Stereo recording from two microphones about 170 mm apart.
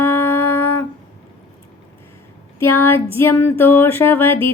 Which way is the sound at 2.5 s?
15° left (ahead or behind).